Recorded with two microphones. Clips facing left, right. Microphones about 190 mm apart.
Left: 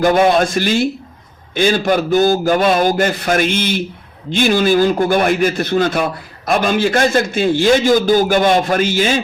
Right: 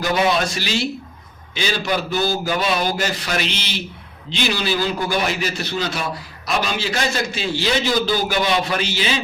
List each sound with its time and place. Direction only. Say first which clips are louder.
0.0 s a man's voice: left 7 dB; 50° left (ahead or behind)